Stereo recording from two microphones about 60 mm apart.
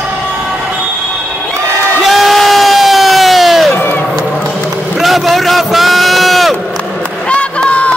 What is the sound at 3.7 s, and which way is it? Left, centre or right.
Crowd, left.